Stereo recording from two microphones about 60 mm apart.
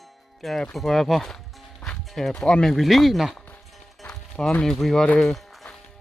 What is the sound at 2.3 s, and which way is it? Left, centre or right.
Speech, centre.